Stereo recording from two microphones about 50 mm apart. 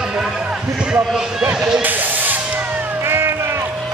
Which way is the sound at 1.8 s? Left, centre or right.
Right.